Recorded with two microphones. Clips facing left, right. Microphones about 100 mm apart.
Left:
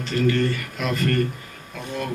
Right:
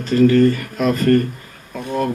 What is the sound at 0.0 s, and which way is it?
A man's voice, 40° right (ahead or behind).